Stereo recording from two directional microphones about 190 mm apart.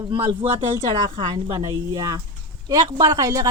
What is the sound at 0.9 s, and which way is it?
Speech, 20° right (ahead or behind).